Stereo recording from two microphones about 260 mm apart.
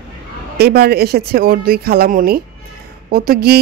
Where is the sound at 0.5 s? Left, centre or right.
Right.